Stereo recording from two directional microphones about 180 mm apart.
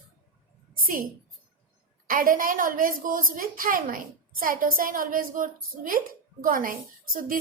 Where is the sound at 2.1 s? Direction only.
50° right (ahead or behind).